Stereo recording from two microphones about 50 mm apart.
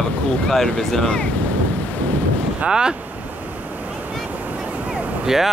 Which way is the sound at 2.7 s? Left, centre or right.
Centre.